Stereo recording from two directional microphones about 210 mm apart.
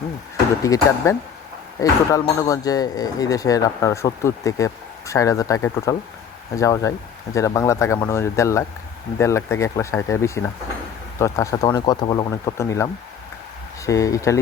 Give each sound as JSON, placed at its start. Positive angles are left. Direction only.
{"t": 0.6, "sound": "speech", "side_deg": 15}